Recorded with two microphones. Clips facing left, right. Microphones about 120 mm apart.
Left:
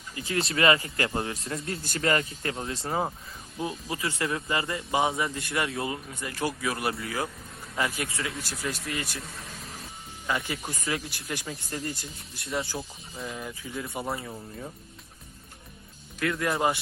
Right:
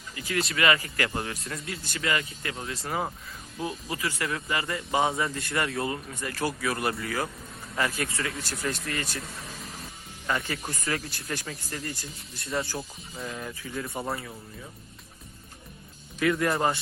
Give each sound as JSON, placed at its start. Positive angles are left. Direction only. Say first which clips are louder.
{"t": 0.2, "sound": "speech", "louder": "left 1 dB", "side_deg": 30}
{"t": 1.6, "sound": "a man's voice", "louder": "left 4 dB", "side_deg": 50}
{"t": 2.6, "sound": "speech", "louder": "left 1 dB", "side_deg": 30}
{"t": 8.0, "sound": "speech", "louder": "right 1 dB", "side_deg": 5}
{"t": 10.4, "sound": "speech", "louder": "even", "side_deg": 15}
{"t": 10.8, "sound": "speech", "louder": "even", "side_deg": 5}
{"t": 11.7, "sound": "speech", "louder": "left 3 dB", "side_deg": 25}
{"t": 12.5, "sound": "speech", "louder": "right 1 dB", "side_deg": 0}
{"t": 13.3, "sound": "speech", "louder": "right 1 dB", "side_deg": 15}
{"t": 13.8, "sound": "speech", "louder": "even", "side_deg": 0}
{"t": 16.2, "sound": "speech", "louder": "right 3 dB", "side_deg": 0}